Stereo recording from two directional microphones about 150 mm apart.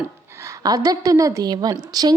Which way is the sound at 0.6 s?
25° right (ahead or behind).